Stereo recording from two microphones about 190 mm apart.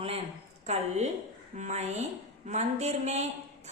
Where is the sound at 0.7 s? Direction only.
35° right (ahead or behind).